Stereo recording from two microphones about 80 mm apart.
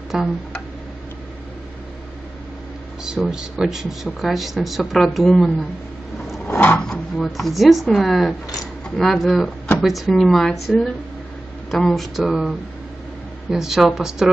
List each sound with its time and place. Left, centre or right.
0.1 s speech: centre
3.0 s speech: centre
6.4 s a sound: left
6.9 s speech: centre